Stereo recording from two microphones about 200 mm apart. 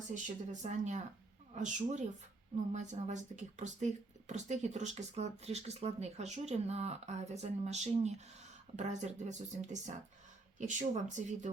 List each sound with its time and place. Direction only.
0.6 s speech: 35° right (ahead or behind)